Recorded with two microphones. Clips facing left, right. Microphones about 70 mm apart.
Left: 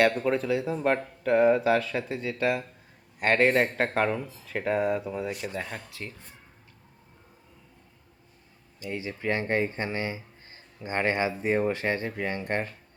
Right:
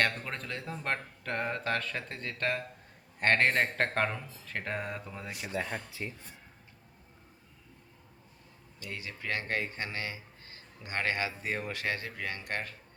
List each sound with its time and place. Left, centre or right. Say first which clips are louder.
0.0 s speech: left 9 dB; centre
5.9 s speech: even; centre
8.8 s speech: left 8 dB; left